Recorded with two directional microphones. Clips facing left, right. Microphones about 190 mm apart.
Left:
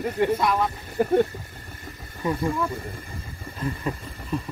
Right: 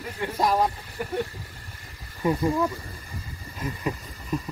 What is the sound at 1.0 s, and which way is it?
Speech, 55° left (ahead or behind).